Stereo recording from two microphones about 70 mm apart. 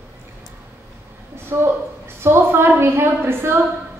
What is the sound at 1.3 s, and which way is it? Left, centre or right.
A woman's voice, right.